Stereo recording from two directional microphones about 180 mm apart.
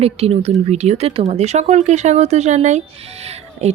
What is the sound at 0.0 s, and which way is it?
Speech, 35° right (ahead or behind).